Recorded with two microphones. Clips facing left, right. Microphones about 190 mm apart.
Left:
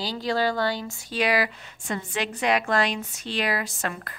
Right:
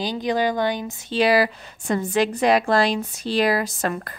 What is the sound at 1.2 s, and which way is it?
A woman's voice, 35° right (ahead or behind).